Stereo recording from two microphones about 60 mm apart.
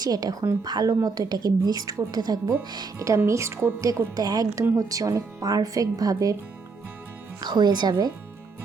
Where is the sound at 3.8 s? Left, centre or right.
Right.